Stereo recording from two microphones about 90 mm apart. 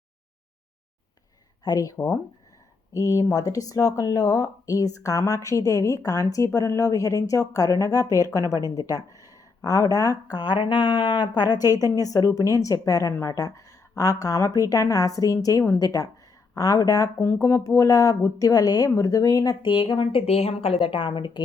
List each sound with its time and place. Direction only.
1.6 s a woman's voice: 45° left (ahead or behind)
19.6 s a woman's voice: 65° left (ahead or behind)